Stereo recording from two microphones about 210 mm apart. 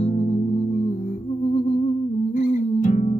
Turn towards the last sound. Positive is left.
turn(degrees=40)  # may be behind; listen again after turning